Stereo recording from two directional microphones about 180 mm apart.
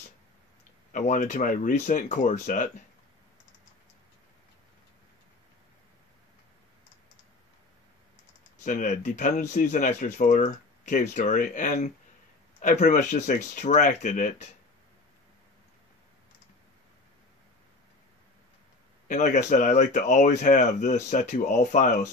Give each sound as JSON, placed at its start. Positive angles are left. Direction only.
{"t": 0.9, "sound": "speech", "side_deg": 45}
{"t": 8.6, "sound": "speech", "side_deg": 45}
{"t": 19.0, "sound": "speech", "side_deg": 40}